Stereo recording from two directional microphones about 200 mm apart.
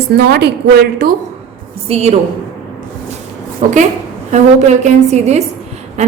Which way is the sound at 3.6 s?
35° right (ahead or behind).